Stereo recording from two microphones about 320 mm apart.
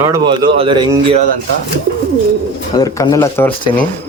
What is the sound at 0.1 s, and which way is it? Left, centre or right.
Speech, centre.